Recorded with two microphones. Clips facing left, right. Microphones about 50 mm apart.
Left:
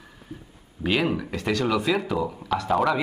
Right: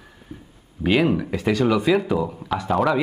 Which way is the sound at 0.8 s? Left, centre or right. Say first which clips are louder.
Right 5 dB; centre.